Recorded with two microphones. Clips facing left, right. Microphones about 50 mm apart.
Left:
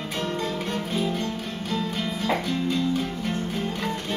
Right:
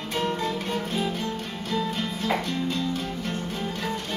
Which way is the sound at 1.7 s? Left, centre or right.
Centre.